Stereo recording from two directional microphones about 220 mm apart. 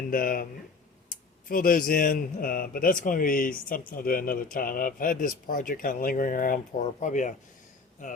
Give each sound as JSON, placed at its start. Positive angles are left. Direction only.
{"t": 0.1, "sound": "a man's voice", "side_deg": 40}
{"t": 1.5, "sound": "a man's voice", "side_deg": 40}